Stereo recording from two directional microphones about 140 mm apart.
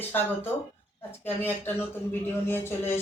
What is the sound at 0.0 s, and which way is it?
A man's voice, 15° left (ahead or behind).